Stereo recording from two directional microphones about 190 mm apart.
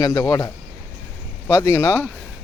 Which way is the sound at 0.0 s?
20° left (ahead or behind).